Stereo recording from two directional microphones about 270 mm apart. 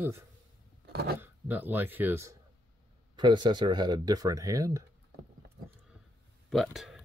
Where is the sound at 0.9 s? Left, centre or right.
Right.